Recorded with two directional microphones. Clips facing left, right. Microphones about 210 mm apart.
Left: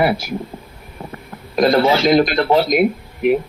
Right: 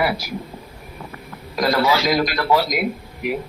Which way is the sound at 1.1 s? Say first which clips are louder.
Left 2 dB; 25° left (ahead or behind).